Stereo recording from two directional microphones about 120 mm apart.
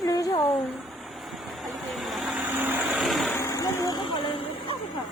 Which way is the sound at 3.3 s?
25° left (ahead or behind).